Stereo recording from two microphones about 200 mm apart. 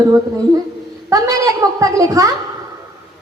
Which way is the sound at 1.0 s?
15° right (ahead or behind).